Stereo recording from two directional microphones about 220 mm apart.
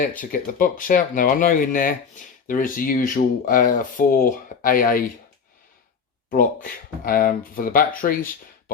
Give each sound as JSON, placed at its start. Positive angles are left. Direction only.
{"t": 0.2, "sound": "speech", "side_deg": 40}
{"t": 6.3, "sound": "speech", "side_deg": 40}